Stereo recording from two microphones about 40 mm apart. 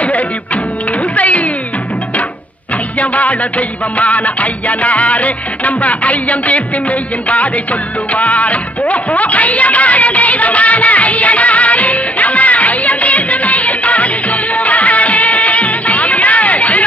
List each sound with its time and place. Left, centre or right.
1.1 s music: left
3.0 s music: left